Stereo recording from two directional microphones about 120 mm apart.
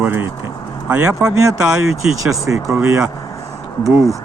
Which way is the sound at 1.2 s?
30° right (ahead or behind).